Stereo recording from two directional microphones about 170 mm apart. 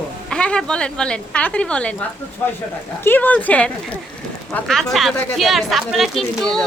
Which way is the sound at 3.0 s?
10° left (ahead or behind).